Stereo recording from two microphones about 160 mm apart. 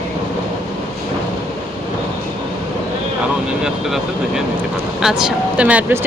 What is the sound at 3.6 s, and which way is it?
Speech, 5° right (ahead or behind).